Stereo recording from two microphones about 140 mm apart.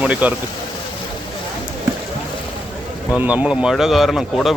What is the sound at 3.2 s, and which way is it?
Speech, 10° right (ahead or behind).